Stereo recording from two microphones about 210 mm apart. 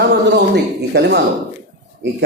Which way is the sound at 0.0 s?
50° right (ahead or behind).